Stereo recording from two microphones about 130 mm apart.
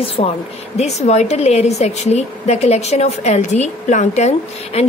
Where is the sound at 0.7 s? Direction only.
55° left (ahead or behind).